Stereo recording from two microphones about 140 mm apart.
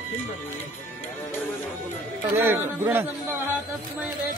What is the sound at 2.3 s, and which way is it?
Speech, 15° right (ahead or behind).